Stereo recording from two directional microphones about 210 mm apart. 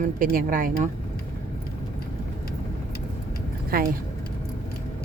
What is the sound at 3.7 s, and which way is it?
Speech, 45° right (ahead or behind).